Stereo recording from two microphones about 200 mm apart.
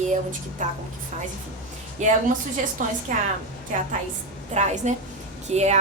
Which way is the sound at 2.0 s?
35° right (ahead or behind).